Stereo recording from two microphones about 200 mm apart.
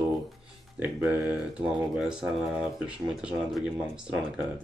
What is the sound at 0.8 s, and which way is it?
Speech, 5° right (ahead or behind).